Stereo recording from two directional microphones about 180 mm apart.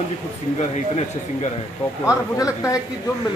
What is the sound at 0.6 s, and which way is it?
Speech, 40° left (ahead or behind).